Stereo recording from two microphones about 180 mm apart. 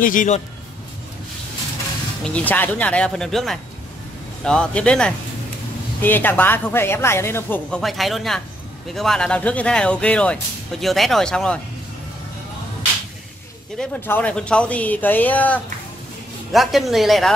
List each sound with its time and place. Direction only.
0.0 s a man's voice: 45° left (ahead or behind)
2.2 s speech: 10° left (ahead or behind)
13.7 s speech: 10° left (ahead or behind)